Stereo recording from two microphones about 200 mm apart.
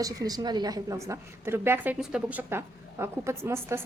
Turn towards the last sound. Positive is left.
turn(degrees=-15)  # may be behind; listen again after turning